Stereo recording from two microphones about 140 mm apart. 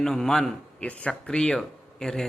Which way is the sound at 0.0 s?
5° left (ahead or behind).